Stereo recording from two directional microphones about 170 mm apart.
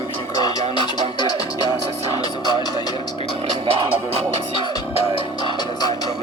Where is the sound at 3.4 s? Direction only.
35° right (ahead or behind).